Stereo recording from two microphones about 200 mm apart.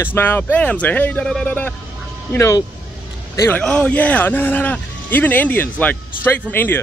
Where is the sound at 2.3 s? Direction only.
15° left (ahead or behind).